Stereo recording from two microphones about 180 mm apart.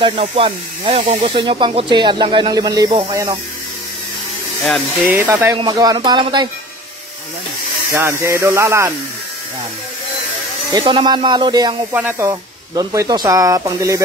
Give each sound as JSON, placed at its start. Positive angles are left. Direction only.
{"t": 0.0, "sound": "speech", "side_deg": -30}
{"t": 5.0, "sound": "speech", "side_deg": -10}
{"t": 7.9, "sound": "speech", "side_deg": -15}
{"t": 10.7, "sound": "speech", "side_deg": -30}
{"t": 11.9, "sound": "speech", "side_deg": -10}